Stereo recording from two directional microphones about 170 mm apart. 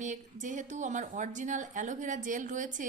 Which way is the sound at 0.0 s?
45° right (ahead or behind).